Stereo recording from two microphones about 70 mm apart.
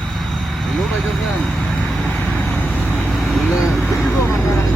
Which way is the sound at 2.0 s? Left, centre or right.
Left.